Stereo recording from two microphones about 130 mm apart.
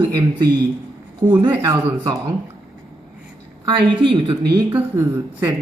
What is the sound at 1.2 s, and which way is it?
Speech, 20° right (ahead or behind).